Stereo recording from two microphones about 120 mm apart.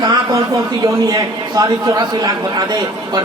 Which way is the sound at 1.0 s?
30° right (ahead or behind).